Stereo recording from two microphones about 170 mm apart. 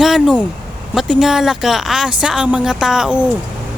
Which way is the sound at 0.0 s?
Centre (ahead or behind).